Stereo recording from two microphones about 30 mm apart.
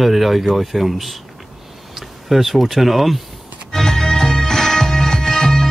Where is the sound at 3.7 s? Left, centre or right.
Centre.